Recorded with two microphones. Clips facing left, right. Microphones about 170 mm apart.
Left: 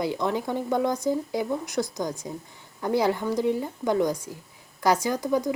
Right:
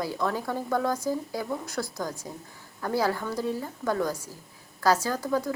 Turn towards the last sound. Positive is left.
turn(degrees=15)  # may be behind; listen again after turning